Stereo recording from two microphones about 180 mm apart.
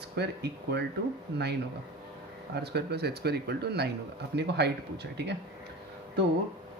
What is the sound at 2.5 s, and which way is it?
Speech, 65° right (ahead or behind).